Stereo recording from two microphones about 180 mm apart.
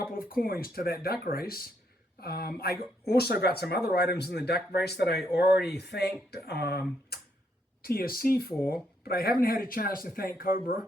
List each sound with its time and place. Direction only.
0.3 s speech: 55° left (ahead or behind)
7.1 s a sound: 55° left (ahead or behind)
7.8 s a man's voice: 55° left (ahead or behind)